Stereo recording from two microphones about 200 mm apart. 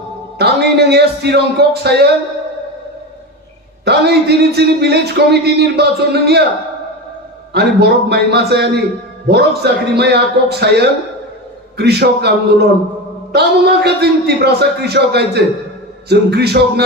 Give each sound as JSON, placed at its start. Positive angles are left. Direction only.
{"t": 0.3, "sound": "speech", "side_deg": -55}
{"t": 3.8, "sound": "speech", "side_deg": -55}
{"t": 7.5, "sound": "speech", "side_deg": -55}